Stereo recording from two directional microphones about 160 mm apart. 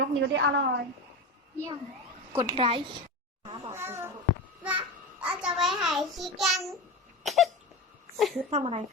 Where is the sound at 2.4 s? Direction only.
35° right (ahead or behind).